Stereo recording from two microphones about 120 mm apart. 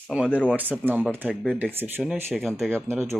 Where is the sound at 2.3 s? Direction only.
Centre (ahead or behind).